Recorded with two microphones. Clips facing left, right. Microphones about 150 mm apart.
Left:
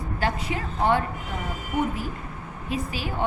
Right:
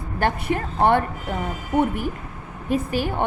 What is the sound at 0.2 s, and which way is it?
Speech, 55° right (ahead or behind).